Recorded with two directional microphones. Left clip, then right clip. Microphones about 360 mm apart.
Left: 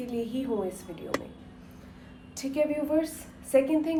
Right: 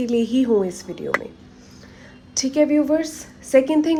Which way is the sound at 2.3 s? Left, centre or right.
Right.